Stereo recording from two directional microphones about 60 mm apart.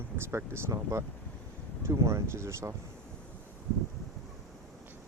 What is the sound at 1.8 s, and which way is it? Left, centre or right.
Speech, right.